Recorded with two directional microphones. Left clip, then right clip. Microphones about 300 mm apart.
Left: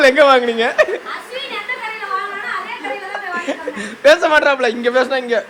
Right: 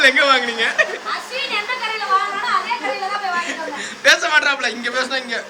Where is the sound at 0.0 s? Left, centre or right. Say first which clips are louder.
Left 3 dB; centre.